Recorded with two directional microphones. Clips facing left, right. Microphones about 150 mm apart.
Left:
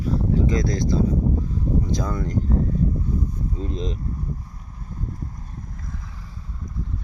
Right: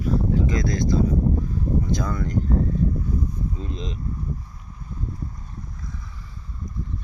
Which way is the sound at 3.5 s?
40° left (ahead or behind).